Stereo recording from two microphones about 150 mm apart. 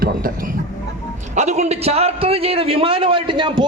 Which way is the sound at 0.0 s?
70° right (ahead or behind).